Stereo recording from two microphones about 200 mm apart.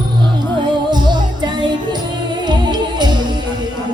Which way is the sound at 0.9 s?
20° right (ahead or behind).